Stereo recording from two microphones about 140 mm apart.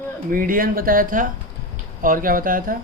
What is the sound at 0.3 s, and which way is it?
Speech, 85° right.